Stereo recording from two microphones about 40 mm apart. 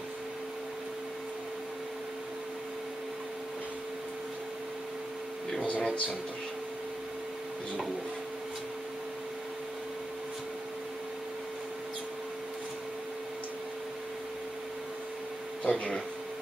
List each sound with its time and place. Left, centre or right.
15.6 s speech: left